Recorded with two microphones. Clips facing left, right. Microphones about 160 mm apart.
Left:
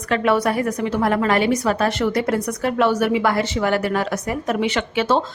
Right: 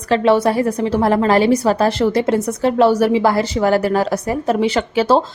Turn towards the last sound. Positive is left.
turn(degrees=-35)  # may be behind; listen again after turning